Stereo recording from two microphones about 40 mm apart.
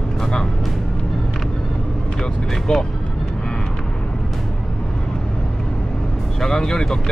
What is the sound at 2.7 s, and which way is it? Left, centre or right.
Speech, centre.